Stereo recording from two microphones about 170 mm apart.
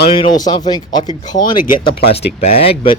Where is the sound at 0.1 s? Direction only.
25° left (ahead or behind).